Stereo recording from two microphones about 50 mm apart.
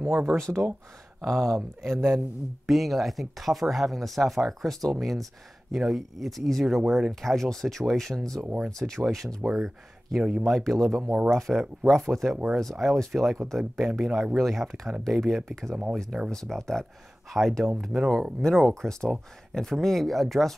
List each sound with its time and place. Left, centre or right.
0.0 s speech: right
0.4 s speech: right
1.2 s speech: centre
10.6 s speech: centre
18.4 s speech: centre